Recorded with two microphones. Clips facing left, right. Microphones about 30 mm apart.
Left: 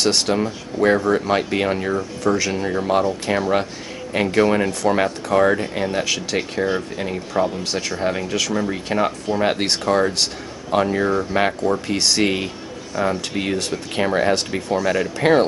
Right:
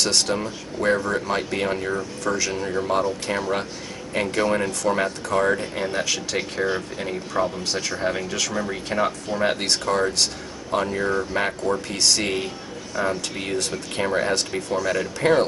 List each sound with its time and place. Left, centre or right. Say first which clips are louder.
0.0 s speech: left 4 dB; centre